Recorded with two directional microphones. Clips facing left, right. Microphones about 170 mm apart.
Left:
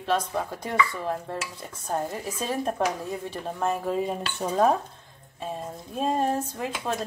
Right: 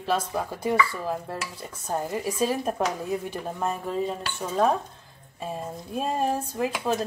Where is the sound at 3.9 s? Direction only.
10° left (ahead or behind).